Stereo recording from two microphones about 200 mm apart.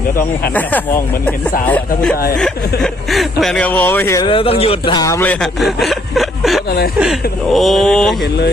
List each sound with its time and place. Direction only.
0.5 s speech: 10° left (ahead or behind)
4.3 s speech: 30° left (ahead or behind); by 6.6 s centre (ahead or behind)
6.7 s speech: 50° left (ahead or behind)
7.0 s speech: centre (ahead or behind)